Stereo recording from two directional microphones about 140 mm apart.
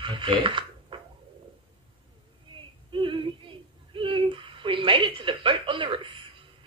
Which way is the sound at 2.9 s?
35° right (ahead or behind).